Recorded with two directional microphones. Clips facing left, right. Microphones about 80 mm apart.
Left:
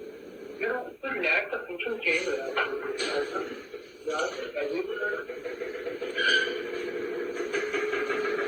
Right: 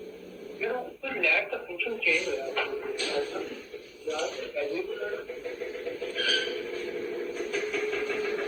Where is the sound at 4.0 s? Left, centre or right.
Left.